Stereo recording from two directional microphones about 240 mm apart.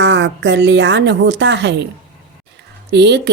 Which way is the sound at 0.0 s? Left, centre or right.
Right.